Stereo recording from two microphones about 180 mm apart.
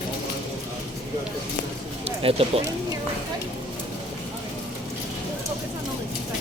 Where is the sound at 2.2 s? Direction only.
30° right (ahead or behind).